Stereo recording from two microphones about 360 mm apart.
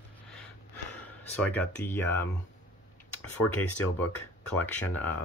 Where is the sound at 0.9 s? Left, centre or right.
Centre.